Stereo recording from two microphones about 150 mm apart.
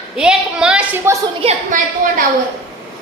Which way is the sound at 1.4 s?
40° right (ahead or behind).